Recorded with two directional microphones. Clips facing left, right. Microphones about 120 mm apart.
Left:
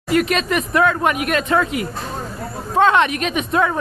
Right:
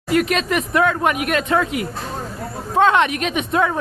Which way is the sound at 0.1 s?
5° right (ahead or behind).